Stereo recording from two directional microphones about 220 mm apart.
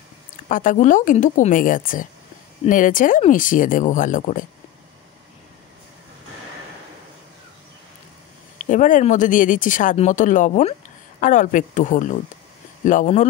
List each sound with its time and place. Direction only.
0.5 s speech: 35° left (ahead or behind)
8.5 s speech: 35° left (ahead or behind)